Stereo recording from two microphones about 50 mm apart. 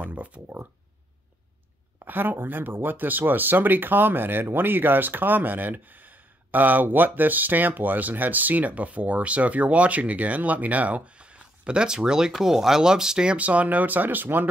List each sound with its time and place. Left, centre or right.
0.0 s a sound: right
2.0 s speech: right; by 13.4 s centre
13.4 s speech: right